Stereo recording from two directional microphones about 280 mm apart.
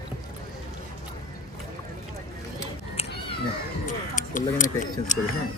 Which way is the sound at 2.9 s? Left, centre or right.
Left.